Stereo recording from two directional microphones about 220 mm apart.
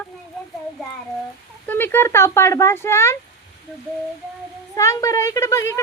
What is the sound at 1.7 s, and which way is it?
Speech, 10° left (ahead or behind).